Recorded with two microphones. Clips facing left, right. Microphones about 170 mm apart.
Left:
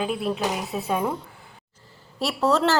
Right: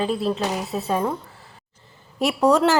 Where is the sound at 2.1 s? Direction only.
15° right (ahead or behind).